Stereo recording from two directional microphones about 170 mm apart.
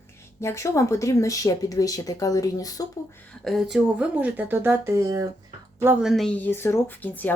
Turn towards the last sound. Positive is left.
turn(degrees=10)  # may be behind; listen again after turning